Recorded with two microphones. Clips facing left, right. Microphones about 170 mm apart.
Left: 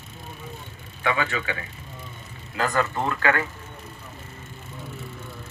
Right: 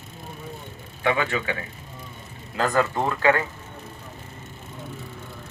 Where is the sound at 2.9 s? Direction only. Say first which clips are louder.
Right 3 dB; 20° right (ahead or behind).